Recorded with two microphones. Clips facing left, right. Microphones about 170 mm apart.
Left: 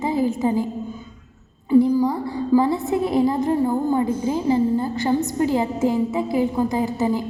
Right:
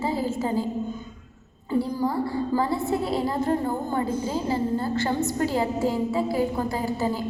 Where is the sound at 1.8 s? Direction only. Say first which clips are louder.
Left 5 dB; 15° left (ahead or behind).